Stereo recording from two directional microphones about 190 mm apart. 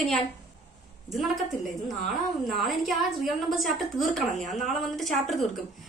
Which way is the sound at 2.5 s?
Centre (ahead or behind).